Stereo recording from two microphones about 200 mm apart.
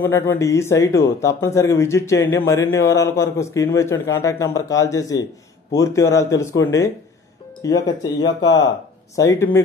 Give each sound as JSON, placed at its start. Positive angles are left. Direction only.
{"t": 0.0, "sound": "speech", "side_deg": 10}